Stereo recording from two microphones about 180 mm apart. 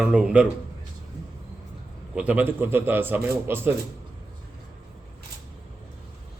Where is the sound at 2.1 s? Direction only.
10° right (ahead or behind).